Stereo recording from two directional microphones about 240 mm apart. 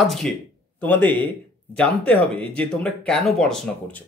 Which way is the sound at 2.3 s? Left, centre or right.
Centre.